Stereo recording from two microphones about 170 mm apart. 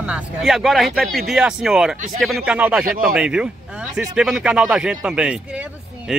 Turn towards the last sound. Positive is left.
turn(degrees=-5)  # may be behind; listen again after turning